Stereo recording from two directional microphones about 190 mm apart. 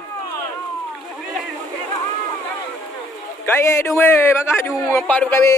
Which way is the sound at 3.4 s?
10° left (ahead or behind).